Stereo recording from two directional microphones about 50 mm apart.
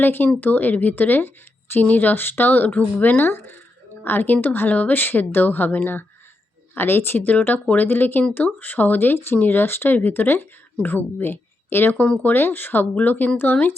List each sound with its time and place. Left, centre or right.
0.0 s speech: left
7.3 s speech: left